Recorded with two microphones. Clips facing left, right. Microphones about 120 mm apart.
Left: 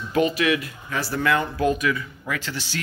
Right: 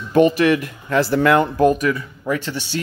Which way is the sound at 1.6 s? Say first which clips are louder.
Right 6 dB; 40° right (ahead or behind).